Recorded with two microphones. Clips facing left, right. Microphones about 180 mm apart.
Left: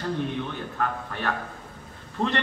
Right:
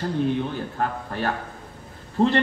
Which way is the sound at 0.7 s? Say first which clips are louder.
Even; 35° right (ahead or behind).